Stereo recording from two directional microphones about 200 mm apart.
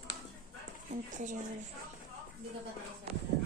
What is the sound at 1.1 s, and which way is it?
Speech, 40° right (ahead or behind).